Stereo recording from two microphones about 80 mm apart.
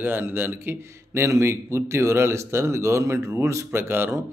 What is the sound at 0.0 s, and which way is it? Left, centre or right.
A man's voice, right.